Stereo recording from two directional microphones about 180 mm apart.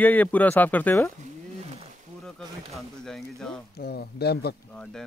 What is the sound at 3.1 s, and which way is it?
Speech, centre (ahead or behind).